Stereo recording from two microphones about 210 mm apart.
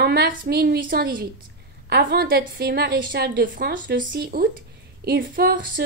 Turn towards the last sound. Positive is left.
turn(degrees=-50)  # may be behind; listen again after turning